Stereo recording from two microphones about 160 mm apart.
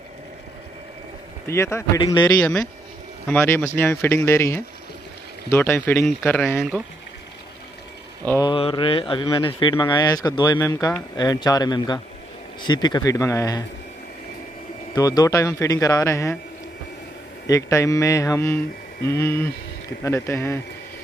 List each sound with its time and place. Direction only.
1.5 s speech: 15° left (ahead or behind)
8.4 s speech: 30° left (ahead or behind)
15.0 s speech: 20° left (ahead or behind)
17.5 s speech: 20° left (ahead or behind)